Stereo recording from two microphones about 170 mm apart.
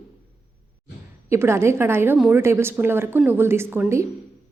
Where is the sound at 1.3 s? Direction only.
15° right (ahead or behind).